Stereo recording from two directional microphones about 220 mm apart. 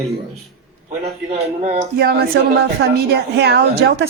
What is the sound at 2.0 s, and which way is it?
A woman's voice, 45° right (ahead or behind).